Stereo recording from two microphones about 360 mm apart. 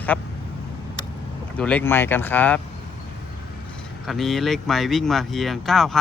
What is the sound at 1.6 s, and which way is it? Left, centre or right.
Speech, centre.